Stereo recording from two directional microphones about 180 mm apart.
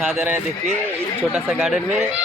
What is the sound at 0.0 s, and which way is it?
Speech, 5° right (ahead or behind).